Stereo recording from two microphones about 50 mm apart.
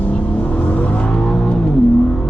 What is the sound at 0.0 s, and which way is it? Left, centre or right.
Vehicle, left.